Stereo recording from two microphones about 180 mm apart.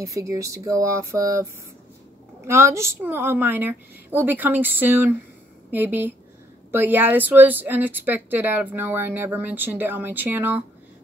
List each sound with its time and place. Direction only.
0.0 s a woman's voice: 15° right (ahead or behind)